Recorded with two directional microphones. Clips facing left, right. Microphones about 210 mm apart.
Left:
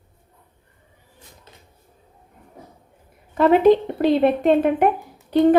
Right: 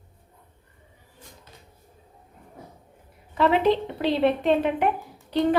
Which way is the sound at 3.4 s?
45° left (ahead or behind).